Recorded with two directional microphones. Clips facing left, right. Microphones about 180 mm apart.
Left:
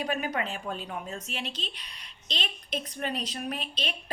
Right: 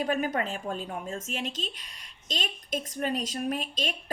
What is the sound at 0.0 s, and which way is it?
A woman's voice, 50° right (ahead or behind).